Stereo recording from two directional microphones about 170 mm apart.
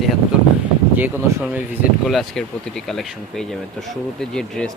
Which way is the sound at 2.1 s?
Centre (ahead or behind).